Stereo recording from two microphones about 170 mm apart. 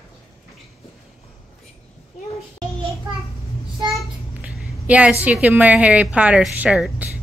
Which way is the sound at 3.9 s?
Centre (ahead or behind).